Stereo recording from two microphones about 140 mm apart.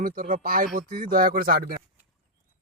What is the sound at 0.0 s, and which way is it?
Speech, 80° right.